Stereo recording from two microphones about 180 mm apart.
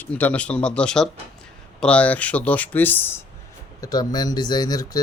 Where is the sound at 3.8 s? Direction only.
20° left (ahead or behind).